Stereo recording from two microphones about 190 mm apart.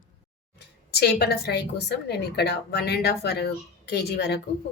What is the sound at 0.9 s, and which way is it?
A woman's voice, 60° left (ahead or behind).